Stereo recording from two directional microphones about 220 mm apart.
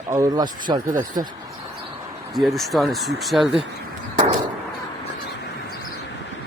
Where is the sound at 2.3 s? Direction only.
Centre (ahead or behind).